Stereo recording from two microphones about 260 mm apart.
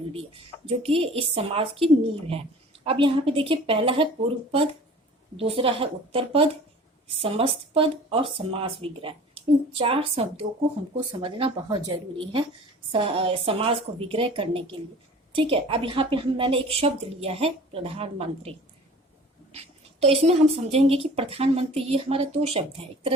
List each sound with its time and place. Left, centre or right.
0.9 s a woman's voice: right
5.4 s a woman's voice: right
19.5 s a woman's voice: right